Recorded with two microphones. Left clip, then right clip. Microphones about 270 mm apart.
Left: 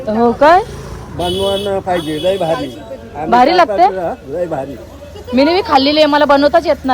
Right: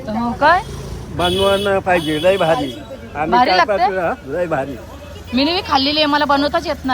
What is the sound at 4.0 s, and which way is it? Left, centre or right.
Speech, right.